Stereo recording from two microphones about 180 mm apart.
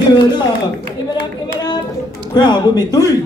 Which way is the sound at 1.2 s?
25° left (ahead or behind).